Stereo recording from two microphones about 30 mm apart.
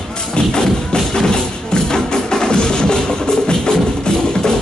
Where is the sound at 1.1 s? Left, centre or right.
Left.